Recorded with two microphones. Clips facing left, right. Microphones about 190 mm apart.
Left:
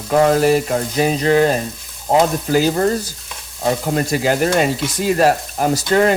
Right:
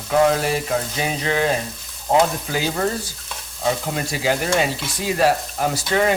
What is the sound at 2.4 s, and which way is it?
Sizzle, 40° left (ahead or behind).